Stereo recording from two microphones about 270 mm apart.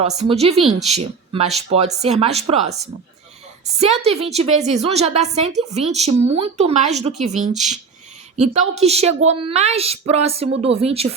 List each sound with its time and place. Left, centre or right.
0.0 s a woman's voice: right